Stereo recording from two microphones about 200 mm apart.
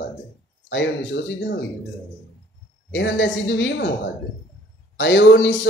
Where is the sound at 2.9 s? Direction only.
65° left (ahead or behind).